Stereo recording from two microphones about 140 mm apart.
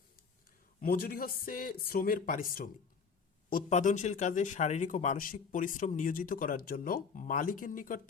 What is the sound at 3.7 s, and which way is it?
A man's voice, 60° left (ahead or behind).